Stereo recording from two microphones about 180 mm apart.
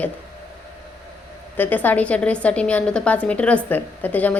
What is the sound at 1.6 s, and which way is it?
A woman's voice, 10° left (ahead or behind).